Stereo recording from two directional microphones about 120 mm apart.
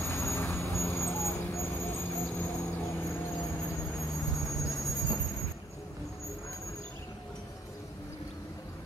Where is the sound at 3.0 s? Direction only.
25° left (ahead or behind).